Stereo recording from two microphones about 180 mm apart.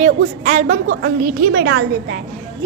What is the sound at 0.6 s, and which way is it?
A woman's voice, 70° right (ahead or behind).